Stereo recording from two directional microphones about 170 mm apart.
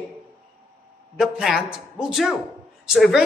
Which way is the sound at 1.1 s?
5° right (ahead or behind).